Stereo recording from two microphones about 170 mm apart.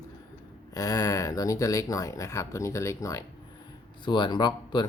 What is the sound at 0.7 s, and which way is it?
Speech, 20° left (ahead or behind).